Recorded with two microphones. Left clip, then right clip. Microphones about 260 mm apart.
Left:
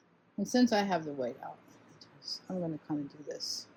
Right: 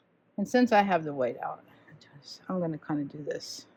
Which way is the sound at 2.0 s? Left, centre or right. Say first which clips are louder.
Left 1 dB; right.